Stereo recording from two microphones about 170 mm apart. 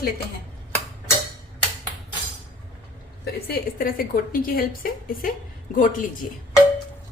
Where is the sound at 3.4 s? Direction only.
60° left (ahead or behind).